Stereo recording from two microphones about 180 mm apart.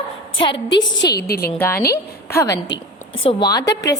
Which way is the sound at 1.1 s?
60° left (ahead or behind).